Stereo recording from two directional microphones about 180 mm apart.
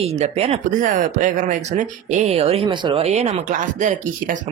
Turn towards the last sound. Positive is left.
turn(degrees=-45)  # may be behind; listen again after turning